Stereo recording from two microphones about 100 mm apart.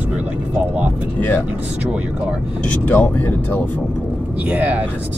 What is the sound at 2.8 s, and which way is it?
Speech, 20° left (ahead or behind).